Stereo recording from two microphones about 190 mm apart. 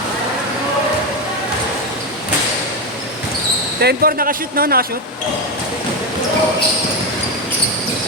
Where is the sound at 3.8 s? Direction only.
55° right (ahead or behind).